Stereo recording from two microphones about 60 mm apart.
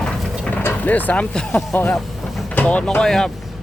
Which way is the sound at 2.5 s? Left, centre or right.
Left.